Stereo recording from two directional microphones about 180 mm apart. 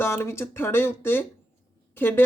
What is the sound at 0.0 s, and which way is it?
Speech, 15° left (ahead or behind).